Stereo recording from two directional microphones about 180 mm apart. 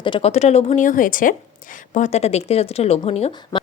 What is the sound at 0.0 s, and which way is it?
Speech, 30° left (ahead or behind).